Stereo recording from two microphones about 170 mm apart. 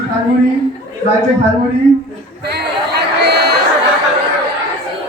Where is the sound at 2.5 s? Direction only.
70° right (ahead or behind).